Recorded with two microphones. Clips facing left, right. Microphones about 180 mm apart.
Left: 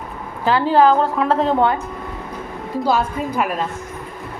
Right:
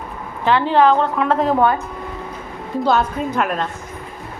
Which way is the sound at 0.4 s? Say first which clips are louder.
Even; 35° left (ahead or behind).